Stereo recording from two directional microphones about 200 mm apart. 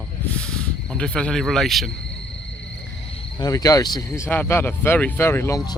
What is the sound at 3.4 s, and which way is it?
Speech, 20° left (ahead or behind).